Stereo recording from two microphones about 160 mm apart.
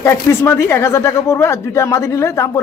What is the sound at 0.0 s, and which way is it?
Speech, 15° left (ahead or behind).